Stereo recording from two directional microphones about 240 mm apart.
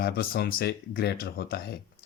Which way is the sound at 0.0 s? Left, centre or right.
Left.